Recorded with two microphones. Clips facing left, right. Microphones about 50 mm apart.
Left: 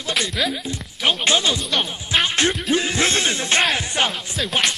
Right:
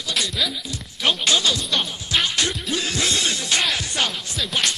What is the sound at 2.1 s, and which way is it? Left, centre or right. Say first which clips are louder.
Music: left 3 dB; left.